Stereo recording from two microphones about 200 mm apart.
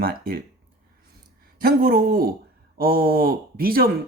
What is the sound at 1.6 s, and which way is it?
Speech, 45° right (ahead or behind).